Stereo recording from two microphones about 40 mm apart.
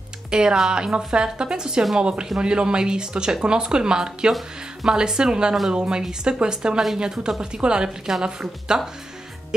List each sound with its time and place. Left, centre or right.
0.3 s speech: centre